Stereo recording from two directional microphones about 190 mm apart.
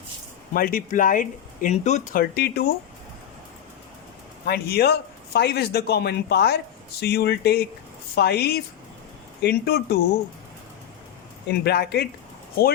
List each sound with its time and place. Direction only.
0.5 s speech: 50° left (ahead or behind)
2.3 s speech: 55° left (ahead or behind)
4.4 s speech: 55° left (ahead or behind)
11.4 s speech: 55° left (ahead or behind)